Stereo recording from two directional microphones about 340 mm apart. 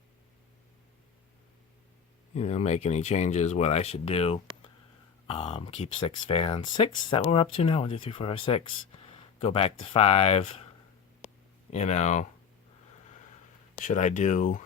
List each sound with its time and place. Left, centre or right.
2.3 s speech: centre
11.7 s speech: centre
13.8 s speech: left